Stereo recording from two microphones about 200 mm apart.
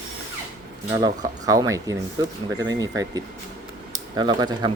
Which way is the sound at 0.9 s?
20° right (ahead or behind).